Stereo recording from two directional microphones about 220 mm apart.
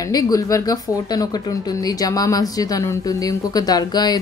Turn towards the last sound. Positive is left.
turn(degrees=20)  # may be behind; listen again after turning